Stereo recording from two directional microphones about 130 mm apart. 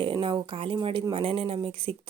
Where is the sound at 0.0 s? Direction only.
40° right (ahead or behind).